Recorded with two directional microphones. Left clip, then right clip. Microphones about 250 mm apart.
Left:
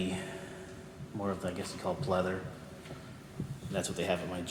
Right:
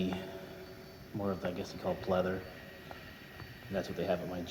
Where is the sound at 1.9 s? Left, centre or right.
Right.